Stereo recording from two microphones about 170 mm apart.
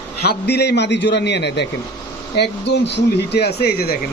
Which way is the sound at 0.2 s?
70° left (ahead or behind).